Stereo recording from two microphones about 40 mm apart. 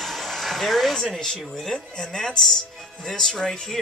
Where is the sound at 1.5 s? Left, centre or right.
Centre.